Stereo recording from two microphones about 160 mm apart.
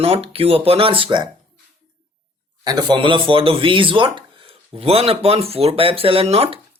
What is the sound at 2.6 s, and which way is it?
Speech, 25° right (ahead or behind).